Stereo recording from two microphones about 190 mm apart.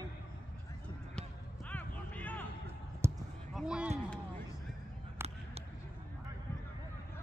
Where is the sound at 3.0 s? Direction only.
15° right (ahead or behind).